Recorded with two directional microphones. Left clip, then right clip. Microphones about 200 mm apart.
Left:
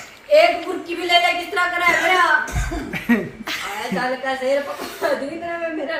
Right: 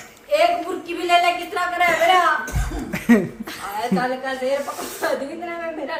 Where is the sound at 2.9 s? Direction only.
50° right (ahead or behind).